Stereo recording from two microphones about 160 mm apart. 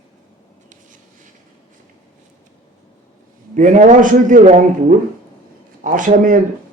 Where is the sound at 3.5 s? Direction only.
50° right (ahead or behind).